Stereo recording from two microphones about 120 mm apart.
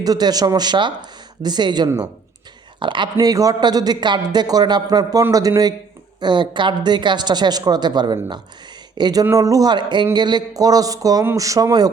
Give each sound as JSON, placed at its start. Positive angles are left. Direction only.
{"t": 0.0, "sound": "speech", "side_deg": -35}
{"t": 6.1, "sound": "speech", "side_deg": -40}